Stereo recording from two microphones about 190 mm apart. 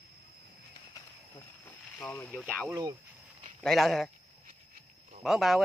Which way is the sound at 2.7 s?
15° right (ahead or behind).